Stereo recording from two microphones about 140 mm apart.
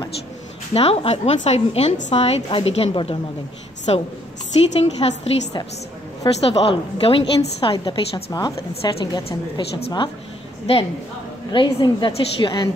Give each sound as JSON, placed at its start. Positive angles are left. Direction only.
{"t": 0.7, "sound": "a woman's voice", "side_deg": 45}
{"t": 9.8, "sound": "a woman's voice", "side_deg": 45}
{"t": 11.5, "sound": "a woman's voice", "side_deg": 35}